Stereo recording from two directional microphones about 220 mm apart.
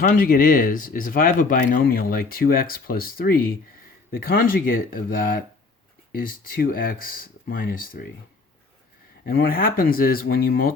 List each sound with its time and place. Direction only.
0.2 s speech: 40° left (ahead or behind)
9.2 s speech: 40° left (ahead or behind)